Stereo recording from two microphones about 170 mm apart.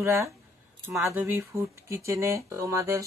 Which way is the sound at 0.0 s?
15° right (ahead or behind).